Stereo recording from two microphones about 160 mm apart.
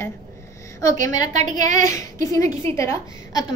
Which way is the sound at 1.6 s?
55° right (ahead or behind).